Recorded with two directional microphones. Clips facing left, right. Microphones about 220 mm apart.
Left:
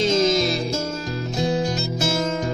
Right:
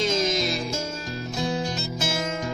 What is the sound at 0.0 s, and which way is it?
Music, 25° left (ahead or behind).